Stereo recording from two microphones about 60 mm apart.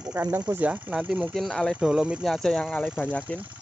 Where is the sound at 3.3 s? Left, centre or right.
Left.